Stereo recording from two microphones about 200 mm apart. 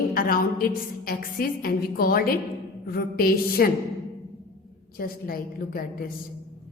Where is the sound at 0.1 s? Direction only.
45° left (ahead or behind).